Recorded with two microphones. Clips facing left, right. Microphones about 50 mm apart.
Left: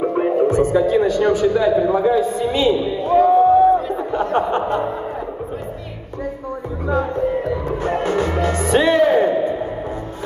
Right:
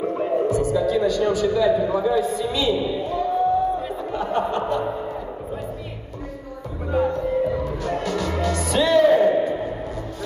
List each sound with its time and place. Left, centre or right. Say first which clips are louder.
0.0 s speech: left 5 dB; left
3.3 s crowd: left 5 dB; left
4.4 s speech: left 2 dB; left
6.9 s music: left 2 dB; left
7.7 s music: left 5 dB; left